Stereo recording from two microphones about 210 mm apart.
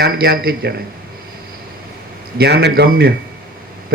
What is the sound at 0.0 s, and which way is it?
Speech, 45° right (ahead or behind).